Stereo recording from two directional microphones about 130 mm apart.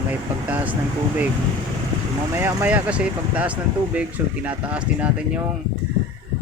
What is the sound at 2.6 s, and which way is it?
Speech, 10° right (ahead or behind).